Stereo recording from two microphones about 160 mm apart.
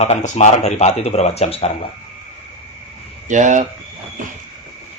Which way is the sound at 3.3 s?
50° right (ahead or behind).